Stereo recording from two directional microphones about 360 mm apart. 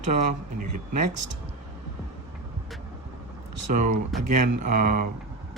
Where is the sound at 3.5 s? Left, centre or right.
Right.